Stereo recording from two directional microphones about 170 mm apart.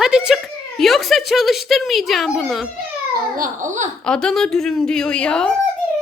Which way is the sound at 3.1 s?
50° right (ahead or behind).